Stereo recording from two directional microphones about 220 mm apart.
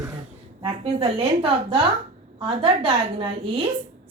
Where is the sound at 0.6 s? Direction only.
25° right (ahead or behind).